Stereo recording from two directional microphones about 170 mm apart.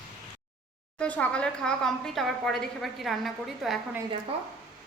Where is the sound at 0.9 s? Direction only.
10° left (ahead or behind).